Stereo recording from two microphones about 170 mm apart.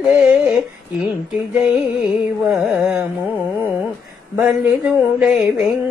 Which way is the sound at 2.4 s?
5° right (ahead or behind).